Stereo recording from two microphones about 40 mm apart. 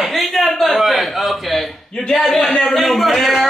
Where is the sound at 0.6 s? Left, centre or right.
Centre.